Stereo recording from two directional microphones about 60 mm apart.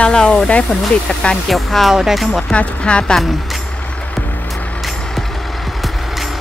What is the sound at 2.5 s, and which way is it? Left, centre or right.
Speech, centre.